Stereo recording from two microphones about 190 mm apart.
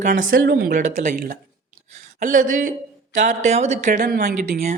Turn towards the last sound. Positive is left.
turn(degrees=-50)  # may be behind; listen again after turning